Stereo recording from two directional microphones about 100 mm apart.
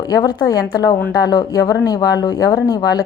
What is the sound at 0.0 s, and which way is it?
A woman's voice, 40° left (ahead or behind).